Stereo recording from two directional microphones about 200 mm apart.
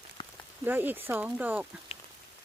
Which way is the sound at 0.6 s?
10° right (ahead or behind).